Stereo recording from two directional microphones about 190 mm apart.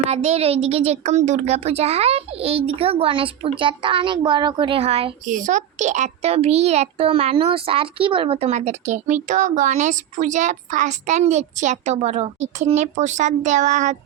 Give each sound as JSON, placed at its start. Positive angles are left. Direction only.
{"t": 0.1, "sound": "speech", "side_deg": -35}